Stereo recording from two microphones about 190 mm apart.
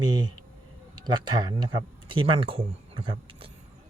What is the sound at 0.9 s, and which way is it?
Speech, 25° right (ahead or behind).